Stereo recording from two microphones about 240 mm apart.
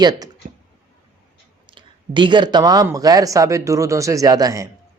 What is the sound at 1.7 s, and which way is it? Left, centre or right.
Speech, centre.